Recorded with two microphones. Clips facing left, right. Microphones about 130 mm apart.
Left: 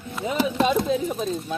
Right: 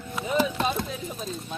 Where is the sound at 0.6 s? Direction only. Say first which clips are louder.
Left 7 dB; 80° left.